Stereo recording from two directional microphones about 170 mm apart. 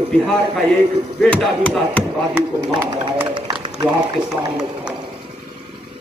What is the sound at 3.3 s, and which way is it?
Run, 20° right (ahead or behind).